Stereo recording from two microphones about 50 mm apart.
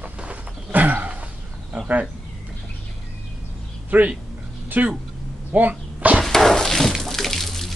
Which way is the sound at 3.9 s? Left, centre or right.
Right.